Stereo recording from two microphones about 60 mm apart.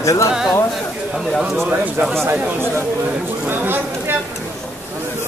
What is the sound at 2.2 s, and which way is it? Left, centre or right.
Speech, right.